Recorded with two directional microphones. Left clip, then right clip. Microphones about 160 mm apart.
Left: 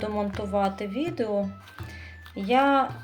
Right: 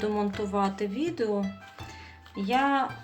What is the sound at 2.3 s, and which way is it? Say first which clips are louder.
Speech: left 4 dB; 35° left (ahead or behind).